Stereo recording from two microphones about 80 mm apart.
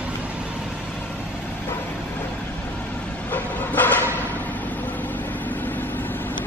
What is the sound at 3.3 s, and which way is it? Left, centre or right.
Train, left.